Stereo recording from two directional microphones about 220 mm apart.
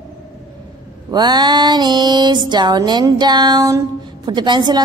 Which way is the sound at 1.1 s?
20° right (ahead or behind).